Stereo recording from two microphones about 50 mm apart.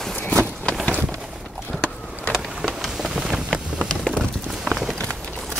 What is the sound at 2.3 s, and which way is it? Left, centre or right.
Vehicle, centre.